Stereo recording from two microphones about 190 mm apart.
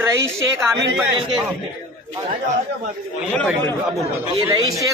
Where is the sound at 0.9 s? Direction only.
5° right (ahead or behind).